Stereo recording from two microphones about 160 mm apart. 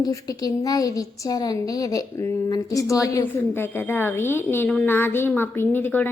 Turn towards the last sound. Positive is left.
turn(degrees=10)  # may be behind; listen again after turning